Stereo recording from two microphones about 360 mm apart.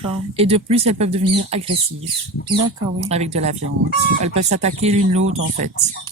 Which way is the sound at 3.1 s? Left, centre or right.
Centre.